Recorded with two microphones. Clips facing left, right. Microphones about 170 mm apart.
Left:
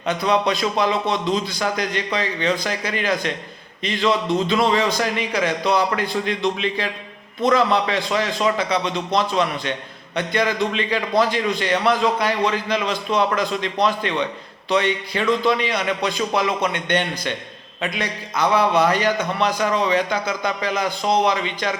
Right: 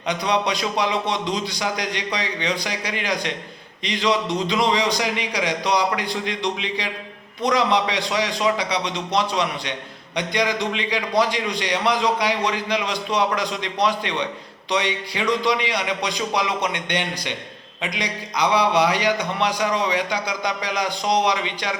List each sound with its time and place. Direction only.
0.1 s a man's voice: 15° right (ahead or behind)